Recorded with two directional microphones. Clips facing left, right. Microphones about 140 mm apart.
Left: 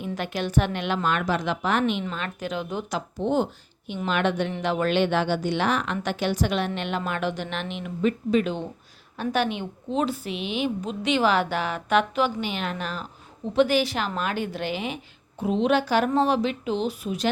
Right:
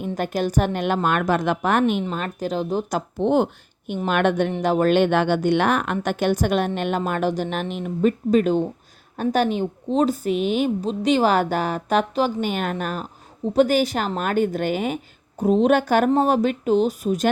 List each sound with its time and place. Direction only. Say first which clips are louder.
0.0 s a woman's voice: right 5 dB; 45° right (ahead or behind)
3.2 s a woman's voice: right 5 dB; 60° right (ahead or behind); by 17.2 s 45° right (ahead or behind)